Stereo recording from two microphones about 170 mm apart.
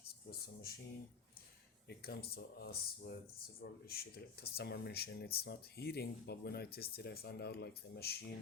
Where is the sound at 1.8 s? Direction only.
70° left (ahead or behind).